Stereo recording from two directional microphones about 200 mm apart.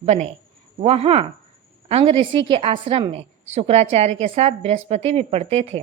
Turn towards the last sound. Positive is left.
turn(degrees=-30)  # may be behind; listen again after turning